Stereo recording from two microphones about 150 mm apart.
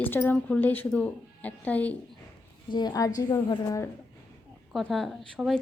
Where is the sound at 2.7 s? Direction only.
25° left (ahead or behind).